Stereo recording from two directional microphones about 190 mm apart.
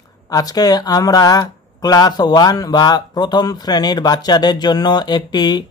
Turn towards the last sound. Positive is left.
turn(degrees=20)  # may be behind; listen again after turning